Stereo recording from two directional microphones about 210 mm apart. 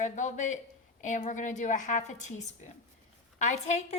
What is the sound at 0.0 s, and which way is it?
A woman's voice, 35° left (ahead or behind).